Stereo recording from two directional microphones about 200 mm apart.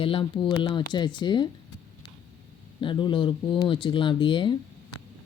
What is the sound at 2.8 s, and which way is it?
Speech, 25° left (ahead or behind).